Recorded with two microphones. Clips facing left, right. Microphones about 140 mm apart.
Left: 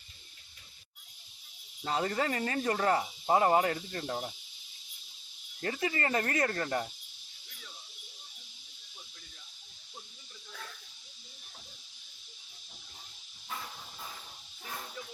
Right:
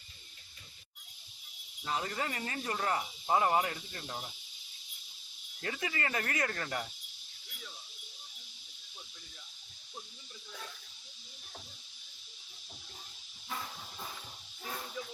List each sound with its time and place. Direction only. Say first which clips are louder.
1.8 s cricket: left 5 dB; 45° left (ahead or behind)
3.2 s cricket: left 4 dB; 35° left (ahead or behind)
5.6 s speech: left 4 dB; 35° left (ahead or behind)